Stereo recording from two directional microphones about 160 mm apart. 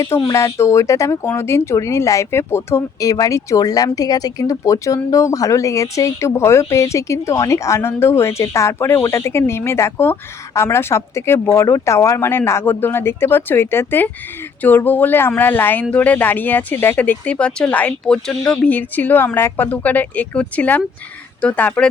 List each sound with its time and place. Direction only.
0.3 s speech: 20° left (ahead or behind)